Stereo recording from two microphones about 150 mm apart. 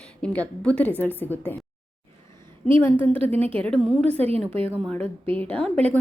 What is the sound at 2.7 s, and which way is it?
Speech, 15° left (ahead or behind).